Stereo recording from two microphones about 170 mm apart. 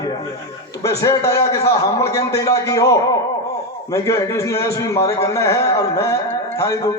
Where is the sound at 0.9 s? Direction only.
20° left (ahead or behind).